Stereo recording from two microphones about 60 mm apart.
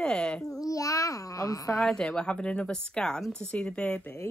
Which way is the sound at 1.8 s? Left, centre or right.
Centre.